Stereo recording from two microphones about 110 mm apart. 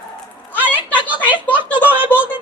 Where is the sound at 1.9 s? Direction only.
15° right (ahead or behind).